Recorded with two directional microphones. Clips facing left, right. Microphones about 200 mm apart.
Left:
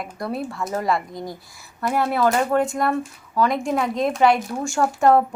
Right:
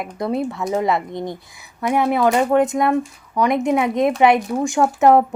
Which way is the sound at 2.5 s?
20° right (ahead or behind).